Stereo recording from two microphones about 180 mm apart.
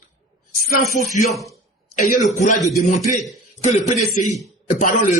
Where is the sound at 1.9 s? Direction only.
45° left (ahead or behind).